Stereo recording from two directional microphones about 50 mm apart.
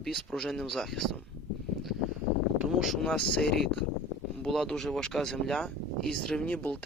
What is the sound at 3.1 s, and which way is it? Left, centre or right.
Speech, left.